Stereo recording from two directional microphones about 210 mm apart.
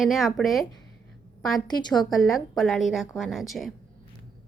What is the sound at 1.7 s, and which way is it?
Speech, 20° left (ahead or behind).